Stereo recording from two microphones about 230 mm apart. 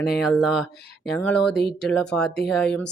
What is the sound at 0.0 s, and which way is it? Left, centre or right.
Speech, centre.